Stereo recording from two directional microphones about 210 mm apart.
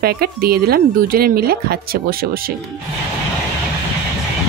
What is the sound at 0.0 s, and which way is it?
Speech, 45° right (ahead or behind).